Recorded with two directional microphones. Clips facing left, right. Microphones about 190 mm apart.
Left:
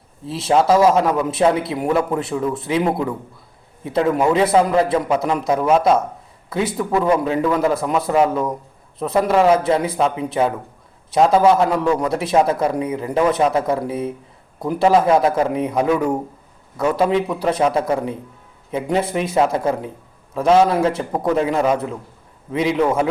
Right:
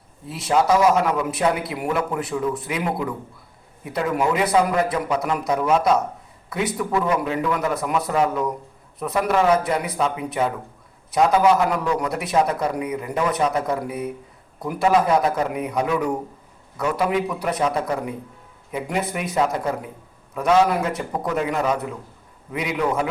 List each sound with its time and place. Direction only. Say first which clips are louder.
0.3 s a man's voice: left 3 dB; 25° left (ahead or behind)